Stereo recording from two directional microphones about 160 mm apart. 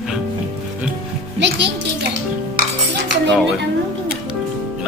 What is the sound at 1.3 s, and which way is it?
Music, 90° right.